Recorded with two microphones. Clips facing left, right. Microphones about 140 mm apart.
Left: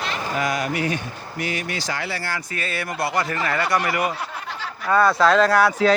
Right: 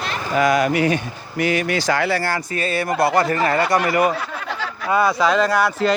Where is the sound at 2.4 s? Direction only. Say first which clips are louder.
Right 6 dB; 25° right (ahead or behind).